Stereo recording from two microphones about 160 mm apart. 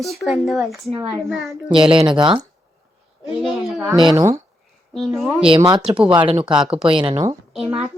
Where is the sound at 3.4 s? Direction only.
10° right (ahead or behind).